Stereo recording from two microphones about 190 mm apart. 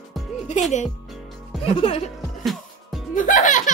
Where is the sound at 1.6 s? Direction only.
30° left (ahead or behind).